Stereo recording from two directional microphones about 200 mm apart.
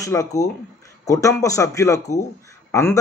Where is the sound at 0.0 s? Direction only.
15° left (ahead or behind).